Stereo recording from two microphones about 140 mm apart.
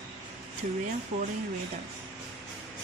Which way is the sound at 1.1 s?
50° right (ahead or behind).